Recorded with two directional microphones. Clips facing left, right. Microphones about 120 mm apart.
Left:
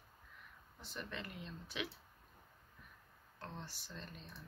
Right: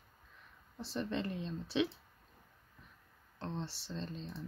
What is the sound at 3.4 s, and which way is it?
Speech, 25° right (ahead or behind).